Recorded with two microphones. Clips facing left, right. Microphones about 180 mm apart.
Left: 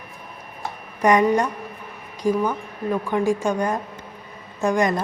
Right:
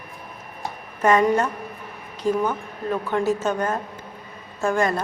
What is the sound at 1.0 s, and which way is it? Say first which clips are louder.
A woman's voice: left 1 dB; 15° left (ahead or behind).